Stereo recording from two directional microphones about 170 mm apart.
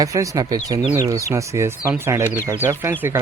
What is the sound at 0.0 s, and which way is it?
Speech, 20° right (ahead or behind).